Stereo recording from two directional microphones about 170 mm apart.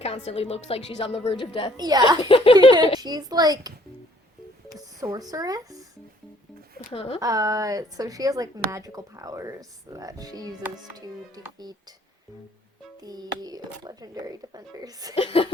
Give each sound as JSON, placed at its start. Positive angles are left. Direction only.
{"t": 0.3, "sound": "speech", "side_deg": 35}
{"t": 1.7, "sound": "speech", "side_deg": -25}
{"t": 2.1, "sound": "speech", "side_deg": 30}
{"t": 3.0, "sound": "speech", "side_deg": -25}
{"t": 4.9, "sound": "speech", "side_deg": -20}
{"t": 6.9, "sound": "speech", "side_deg": 35}
{"t": 7.2, "sound": "speech", "side_deg": -20}
{"t": 11.5, "sound": "speech", "side_deg": -25}
{"t": 13.0, "sound": "speech", "side_deg": -25}
{"t": 15.1, "sound": "speech", "side_deg": 35}